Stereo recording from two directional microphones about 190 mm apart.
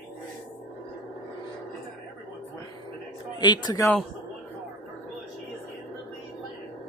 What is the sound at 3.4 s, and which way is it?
Speech, 20° left (ahead or behind).